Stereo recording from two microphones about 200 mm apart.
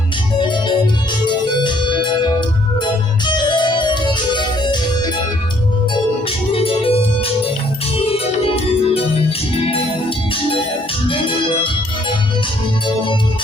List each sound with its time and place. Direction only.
1.6 s organ: 25° left (ahead or behind)
4.4 s music: 25° left (ahead or behind)
6.5 s organ: 30° left (ahead or behind)
8.1 s organ: 30° left (ahead or behind)
11.1 s music: 25° left (ahead or behind)